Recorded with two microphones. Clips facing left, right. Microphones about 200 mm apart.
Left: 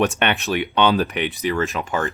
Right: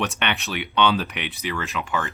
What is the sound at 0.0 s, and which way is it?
Speech, 50° left (ahead or behind).